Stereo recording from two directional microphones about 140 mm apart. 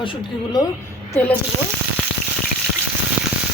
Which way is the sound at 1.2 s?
10° left (ahead or behind).